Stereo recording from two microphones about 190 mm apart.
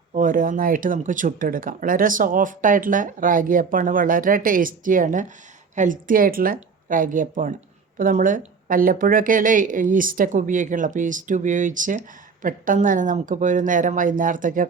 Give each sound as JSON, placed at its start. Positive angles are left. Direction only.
{"t": 0.1, "sound": "speech", "side_deg": -45}